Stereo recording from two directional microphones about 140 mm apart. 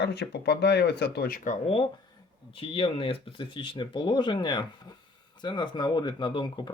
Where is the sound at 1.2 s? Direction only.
90° left.